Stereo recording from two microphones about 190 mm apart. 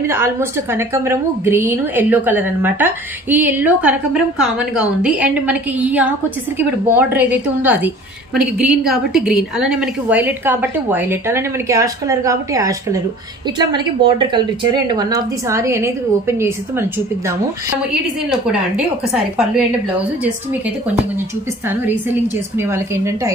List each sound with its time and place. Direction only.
0.0 s a woman's voice: 15° right (ahead or behind)
18.3 s speech: 5° right (ahead or behind)
22.6 s a woman's voice: 15° right (ahead or behind)